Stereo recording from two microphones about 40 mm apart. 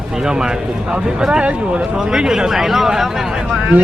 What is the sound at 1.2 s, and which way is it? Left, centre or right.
Speech, centre.